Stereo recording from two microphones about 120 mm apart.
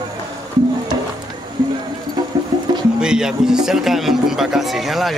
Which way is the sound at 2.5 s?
35° right (ahead or behind).